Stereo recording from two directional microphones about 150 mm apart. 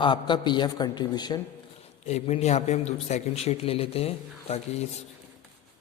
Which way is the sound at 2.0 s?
45° left (ahead or behind).